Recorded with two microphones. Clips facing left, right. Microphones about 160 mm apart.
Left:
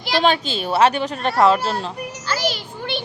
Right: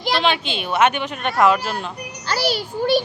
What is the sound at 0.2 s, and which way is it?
Speech, 40° left (ahead or behind).